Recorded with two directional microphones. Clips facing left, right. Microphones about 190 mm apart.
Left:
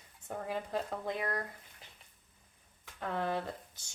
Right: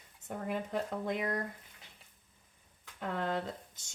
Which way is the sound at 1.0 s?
20° right (ahead or behind).